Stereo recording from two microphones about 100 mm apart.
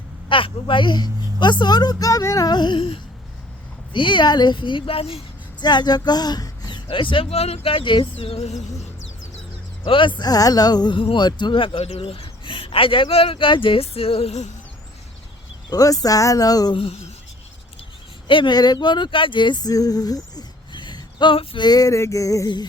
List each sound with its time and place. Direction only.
0.3 s a woman's voice: 55° left (ahead or behind)
5.5 s speech: 45° left (ahead or behind)
6.8 s speech: 55° left (ahead or behind); by 8.5 s 75° left (ahead or behind)
9.8 s speech: 55° left (ahead or behind)
10.2 s a man's voice: 40° left (ahead or behind); by 14.3 s 75° left (ahead or behind)
15.7 s speech: 40° left (ahead or behind)
16.7 s a man's voice: 65° left (ahead or behind)
18.3 s speech: 55° left (ahead or behind)